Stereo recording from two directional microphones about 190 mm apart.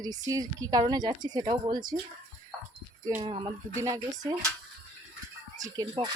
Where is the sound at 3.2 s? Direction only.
25° right (ahead or behind).